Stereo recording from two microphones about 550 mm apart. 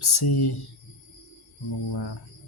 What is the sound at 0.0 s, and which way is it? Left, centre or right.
Speech, left.